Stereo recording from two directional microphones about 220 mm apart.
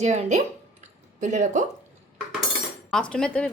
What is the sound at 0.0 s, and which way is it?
Speech, 30° right (ahead or behind).